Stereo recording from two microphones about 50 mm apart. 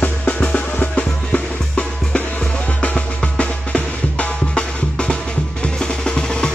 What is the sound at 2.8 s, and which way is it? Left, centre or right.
Drum, left.